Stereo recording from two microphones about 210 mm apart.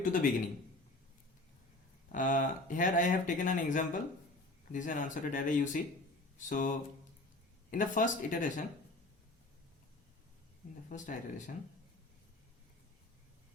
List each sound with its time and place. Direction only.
0.0 s speech: 40° left (ahead or behind)
2.1 s speech: 40° left (ahead or behind)
6.3 s mantra: 35° left (ahead or behind)
7.7 s speech: 40° left (ahead or behind)
10.8 s speech: 35° left (ahead or behind)